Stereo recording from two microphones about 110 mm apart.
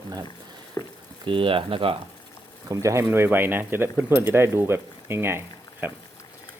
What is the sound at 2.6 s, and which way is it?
Speech, 25° right (ahead or behind).